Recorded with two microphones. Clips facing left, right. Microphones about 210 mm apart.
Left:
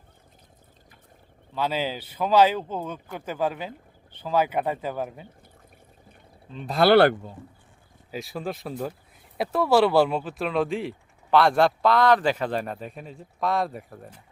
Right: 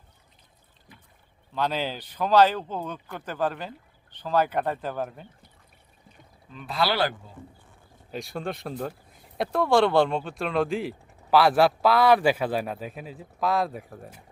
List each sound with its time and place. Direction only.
1.5 s speech: 5° left (ahead or behind)
6.7 s speech: 50° left (ahead or behind)
8.1 s speech: centre (ahead or behind)